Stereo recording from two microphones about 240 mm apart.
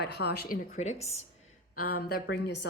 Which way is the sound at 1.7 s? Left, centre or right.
Left.